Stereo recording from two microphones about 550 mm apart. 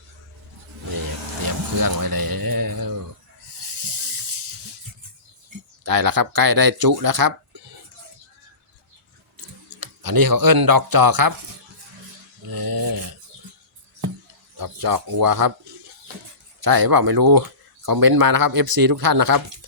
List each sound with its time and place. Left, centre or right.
1.5 s a sound: right
5.8 s speech: right
9.8 s speech: right
12.5 s a sound: right
14.6 s speech: right
16.6 s speech: right